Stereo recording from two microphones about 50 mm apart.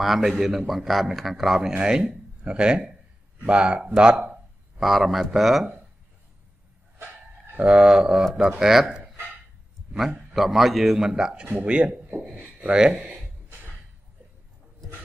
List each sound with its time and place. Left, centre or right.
0.0 s a man's voice: centre
4.7 s a man's voice: centre
7.0 s a sound: right
7.6 s speech: centre
10.3 s a man's voice: centre
11.6 s speech: right
12.2 s speech: centre